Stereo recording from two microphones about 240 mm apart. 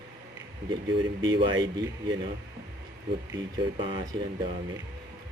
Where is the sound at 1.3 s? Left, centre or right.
Centre.